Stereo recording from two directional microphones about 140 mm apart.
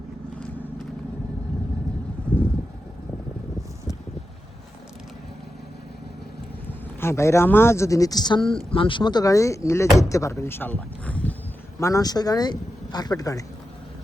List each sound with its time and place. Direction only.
2.3 s vehicle: 10° left (ahead or behind)
6.7 s speech: 20° left (ahead or behind)
11.8 s speech: 25° left (ahead or behind)